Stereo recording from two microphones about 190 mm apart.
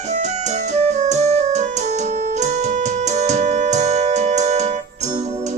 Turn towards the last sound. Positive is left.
turn(degrees=-35)  # may be behind; listen again after turning